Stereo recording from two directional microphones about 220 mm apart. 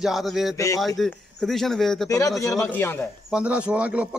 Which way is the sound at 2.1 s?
15° left (ahead or behind).